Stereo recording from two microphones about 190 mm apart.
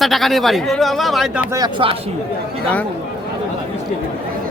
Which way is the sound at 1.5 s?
20° right (ahead or behind).